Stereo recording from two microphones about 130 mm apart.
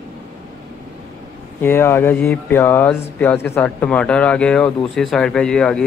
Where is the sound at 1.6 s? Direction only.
20° left (ahead or behind).